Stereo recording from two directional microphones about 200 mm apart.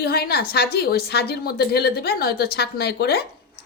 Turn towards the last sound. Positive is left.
turn(degrees=55)  # may be behind; listen again after turning